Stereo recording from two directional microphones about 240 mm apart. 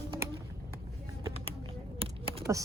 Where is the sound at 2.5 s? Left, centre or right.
Centre.